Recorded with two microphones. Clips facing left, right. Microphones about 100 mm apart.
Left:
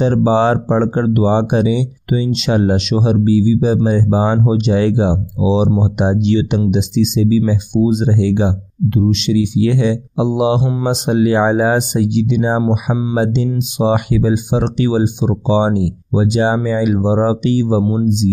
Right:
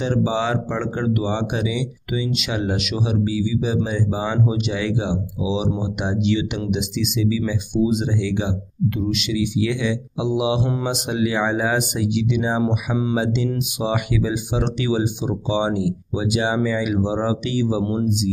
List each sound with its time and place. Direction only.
0.0 s speech: 40° left (ahead or behind)
10.6 s speech: 15° left (ahead or behind)
10.9 s speech: 35° left (ahead or behind)
12.5 s speech: 15° left (ahead or behind)
13.1 s speech: 35° left (ahead or behind)
17.8 s speech: 15° left (ahead or behind)